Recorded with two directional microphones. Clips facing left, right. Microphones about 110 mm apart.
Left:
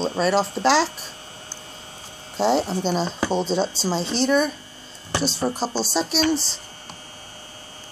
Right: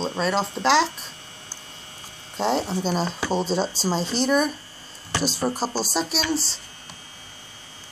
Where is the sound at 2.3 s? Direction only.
Centre (ahead or behind).